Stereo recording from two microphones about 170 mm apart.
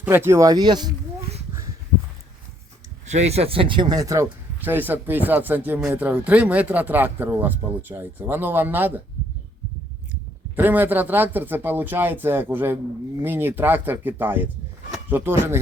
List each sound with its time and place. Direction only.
0.0 s speech: 15° right (ahead or behind)
3.1 s speech: 40° right (ahead or behind); by 8.9 s 10° right (ahead or behind)
10.5 s speech: 10° right (ahead or behind)